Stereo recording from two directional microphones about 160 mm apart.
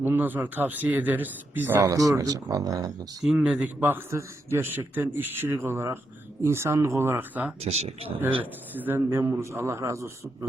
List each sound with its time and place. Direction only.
0.0 s speech: 10° right (ahead or behind)
3.2 s speech: 5° right (ahead or behind)
7.6 s speech: 40° right (ahead or behind)
8.7 s speech: 10° right (ahead or behind)